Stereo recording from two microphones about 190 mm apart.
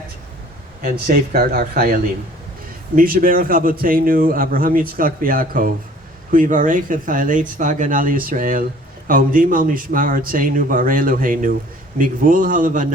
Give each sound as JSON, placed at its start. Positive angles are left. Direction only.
{"t": 0.8, "sound": "a man's voice", "side_deg": -50}